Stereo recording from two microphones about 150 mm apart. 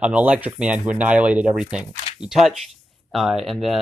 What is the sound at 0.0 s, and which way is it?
Speech, 10° right (ahead or behind).